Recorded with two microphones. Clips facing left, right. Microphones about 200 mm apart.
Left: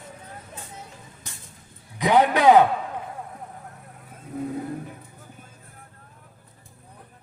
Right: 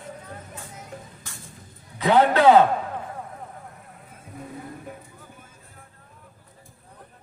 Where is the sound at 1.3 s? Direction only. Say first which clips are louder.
Right 1 dB; 20° left (ahead or behind).